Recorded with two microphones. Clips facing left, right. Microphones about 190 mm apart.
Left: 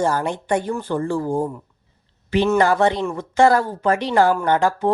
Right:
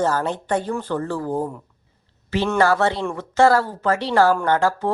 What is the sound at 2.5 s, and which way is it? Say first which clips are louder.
Speech: right 1 dB; 15° left (ahead or behind).